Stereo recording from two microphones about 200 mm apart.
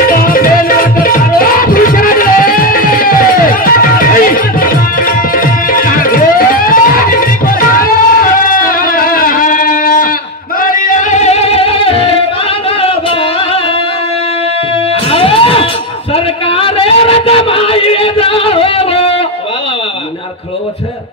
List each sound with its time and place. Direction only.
0.0 s music: 45° left (ahead or behind); by 12.1 s 30° left (ahead or behind)
15.0 s music: 30° left (ahead or behind)